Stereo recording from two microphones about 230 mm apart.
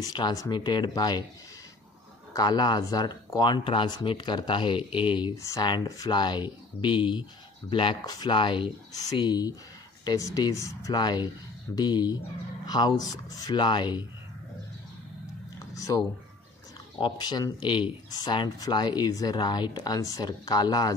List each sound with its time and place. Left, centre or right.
0.0 s speech: centre
2.3 s speech: centre
15.7 s a sound: centre
17.0 s speech: centre